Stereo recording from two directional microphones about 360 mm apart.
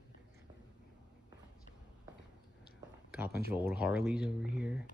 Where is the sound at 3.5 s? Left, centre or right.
Centre.